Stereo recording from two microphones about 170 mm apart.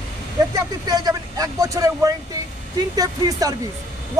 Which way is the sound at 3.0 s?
20° right (ahead or behind).